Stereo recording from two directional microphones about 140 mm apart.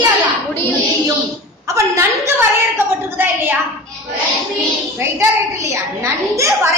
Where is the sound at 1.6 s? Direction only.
20° right (ahead or behind).